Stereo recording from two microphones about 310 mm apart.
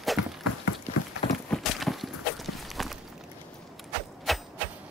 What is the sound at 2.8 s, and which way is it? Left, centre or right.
Walk, centre.